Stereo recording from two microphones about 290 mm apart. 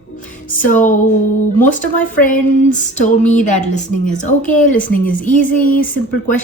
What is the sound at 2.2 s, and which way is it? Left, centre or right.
Speech, left.